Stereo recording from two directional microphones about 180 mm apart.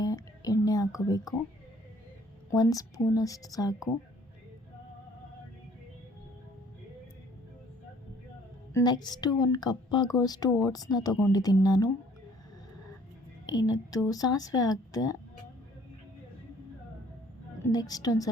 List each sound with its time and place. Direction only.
0.0 s a sound: 20° left (ahead or behind)
2.5 s a woman's voice: 20° left (ahead or behind)
8.7 s a woman's voice: 25° left (ahead or behind)
13.5 s a woman's voice: 20° left (ahead or behind)
17.7 s a woman's voice: 20° left (ahead or behind)